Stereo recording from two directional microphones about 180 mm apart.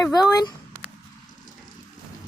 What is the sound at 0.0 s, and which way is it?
Speech, 20° left (ahead or behind).